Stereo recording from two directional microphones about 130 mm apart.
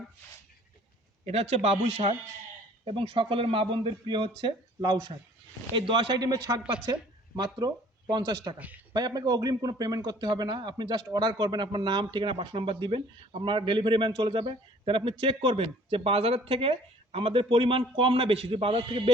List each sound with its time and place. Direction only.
1.2 s a man's voice: 55° right (ahead or behind); by 8.5 s 30° right (ahead or behind)
8.5 s a man's voice: 10° right (ahead or behind)
8.9 s a man's voice: 30° right (ahead or behind)